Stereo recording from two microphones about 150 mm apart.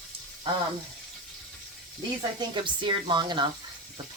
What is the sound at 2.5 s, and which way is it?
Speech, 35° right (ahead or behind).